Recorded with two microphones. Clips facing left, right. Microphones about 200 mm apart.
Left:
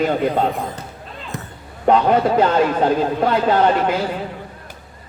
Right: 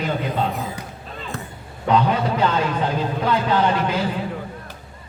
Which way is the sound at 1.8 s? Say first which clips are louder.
Left 5 dB; 50° left (ahead or behind).